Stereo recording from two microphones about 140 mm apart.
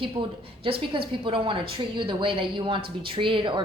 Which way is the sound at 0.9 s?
40° right (ahead or behind).